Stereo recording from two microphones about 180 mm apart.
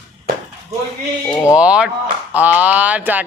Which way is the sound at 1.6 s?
5° right (ahead or behind).